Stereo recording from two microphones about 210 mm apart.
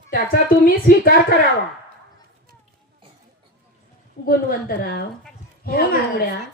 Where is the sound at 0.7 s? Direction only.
45° left (ahead or behind).